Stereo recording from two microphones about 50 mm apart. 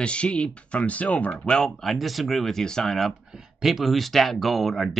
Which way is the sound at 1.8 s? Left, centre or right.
Centre.